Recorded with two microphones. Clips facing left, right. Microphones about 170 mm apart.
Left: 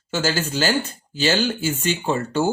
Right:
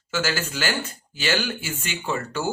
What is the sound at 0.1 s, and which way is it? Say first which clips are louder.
Speech: left 4 dB; 30° left (ahead or behind).